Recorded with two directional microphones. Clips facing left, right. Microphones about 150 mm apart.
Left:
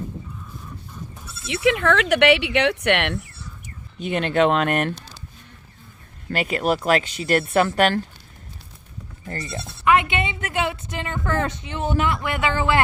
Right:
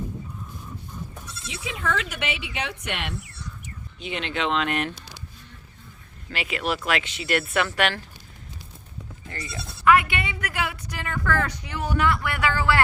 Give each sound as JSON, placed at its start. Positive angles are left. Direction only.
{"t": 1.5, "sound": "speech", "side_deg": 70}
{"t": 4.0, "sound": "speech", "side_deg": 50}
{"t": 6.3, "sound": "speech", "side_deg": 45}
{"t": 9.2, "sound": "speech", "side_deg": 40}
{"t": 9.8, "sound": "a woman's voice", "side_deg": 20}